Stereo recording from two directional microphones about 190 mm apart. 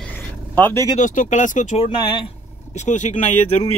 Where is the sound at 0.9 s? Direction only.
40° left (ahead or behind).